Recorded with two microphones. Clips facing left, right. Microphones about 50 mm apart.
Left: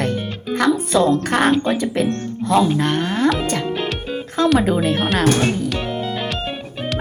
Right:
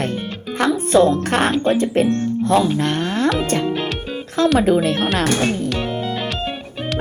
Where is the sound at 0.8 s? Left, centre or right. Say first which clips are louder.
Right 2 dB; right.